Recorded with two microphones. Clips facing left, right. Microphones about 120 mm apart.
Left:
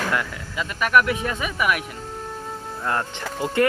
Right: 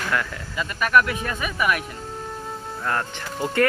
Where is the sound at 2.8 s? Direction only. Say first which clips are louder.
Left 1 dB; 20° left (ahead or behind).